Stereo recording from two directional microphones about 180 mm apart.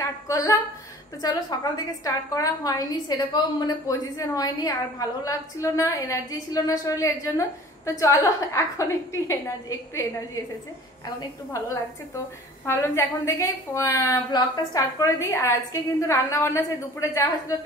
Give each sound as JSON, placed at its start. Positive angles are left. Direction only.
{"t": 0.0, "sound": "a sound", "side_deg": 20}
{"t": 1.2, "sound": "a woman's voice", "side_deg": 20}
{"t": 11.1, "sound": "a woman's voice", "side_deg": 20}